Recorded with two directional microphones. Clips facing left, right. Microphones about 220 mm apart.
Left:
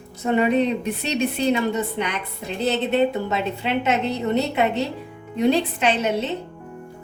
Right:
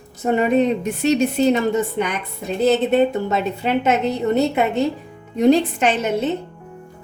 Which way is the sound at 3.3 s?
45° right (ahead or behind).